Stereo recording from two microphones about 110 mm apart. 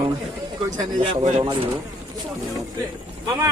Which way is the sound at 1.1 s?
90° right.